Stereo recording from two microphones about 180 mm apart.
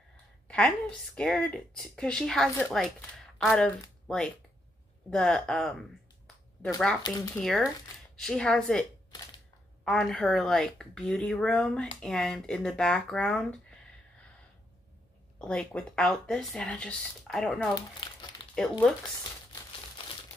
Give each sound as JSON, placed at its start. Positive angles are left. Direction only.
{"t": 0.5, "sound": "speech", "side_deg": 5}
{"t": 9.8, "sound": "speech", "side_deg": 5}
{"t": 15.3, "sound": "speech", "side_deg": 5}
{"t": 18.0, "sound": "crumpling", "side_deg": 25}
{"t": 18.5, "sound": "speech", "side_deg": 5}